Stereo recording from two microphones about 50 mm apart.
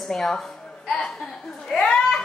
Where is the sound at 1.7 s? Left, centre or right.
Centre.